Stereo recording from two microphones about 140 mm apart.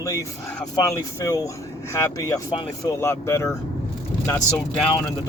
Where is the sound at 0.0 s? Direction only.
20° left (ahead or behind).